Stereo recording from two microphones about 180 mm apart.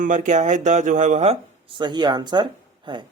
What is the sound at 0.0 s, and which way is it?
Speech, 45° right (ahead or behind).